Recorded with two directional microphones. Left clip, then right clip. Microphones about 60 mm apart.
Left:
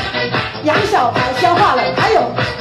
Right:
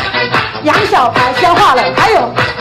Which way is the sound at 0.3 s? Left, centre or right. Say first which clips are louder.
Right 4 dB; right.